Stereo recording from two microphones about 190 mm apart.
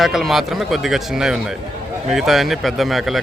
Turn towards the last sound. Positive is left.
turn(degrees=0)  # may be behind; listen again after turning